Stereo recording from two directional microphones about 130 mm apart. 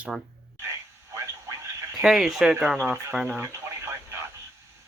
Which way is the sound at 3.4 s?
20° right (ahead or behind).